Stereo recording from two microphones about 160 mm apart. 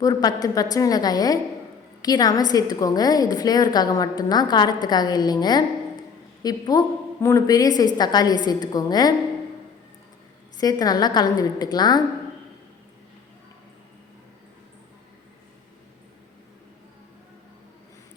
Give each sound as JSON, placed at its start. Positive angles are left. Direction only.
{"t": 0.0, "sound": "a woman's voice", "side_deg": 25}
{"t": 10.6, "sound": "a woman's voice", "side_deg": 25}